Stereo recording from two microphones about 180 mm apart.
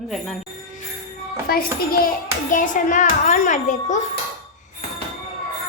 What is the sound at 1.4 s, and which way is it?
A child's voice, 55° left (ahead or behind).